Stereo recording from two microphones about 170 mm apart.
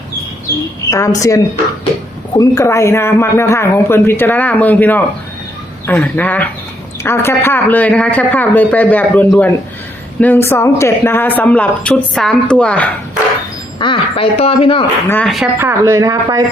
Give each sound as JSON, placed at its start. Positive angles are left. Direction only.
{"t": 0.9, "sound": "a woman's voice", "side_deg": 20}
{"t": 13.7, "sound": "speech", "side_deg": 30}
{"t": 15.0, "sound": "a man's voice", "side_deg": 10}
{"t": 15.5, "sound": "speech", "side_deg": -15}